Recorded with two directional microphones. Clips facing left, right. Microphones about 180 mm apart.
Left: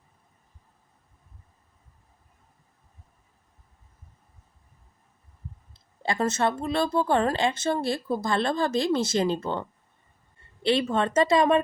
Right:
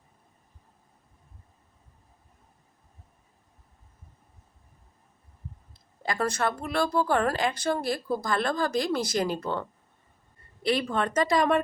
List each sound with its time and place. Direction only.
5.7 s a woman's voice: 25° left (ahead or behind)